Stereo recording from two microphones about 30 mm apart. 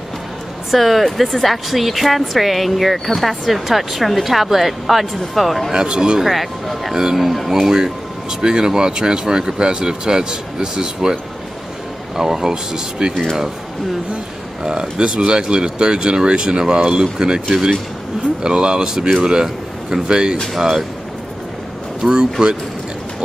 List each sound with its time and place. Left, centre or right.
0.7 s speech: centre
5.7 s speech: right
6.2 s speech: centre; by 11.1 s right
12.2 s speech: centre
14.6 s speech: right
18.4 s speech: right
22.0 s speech: centre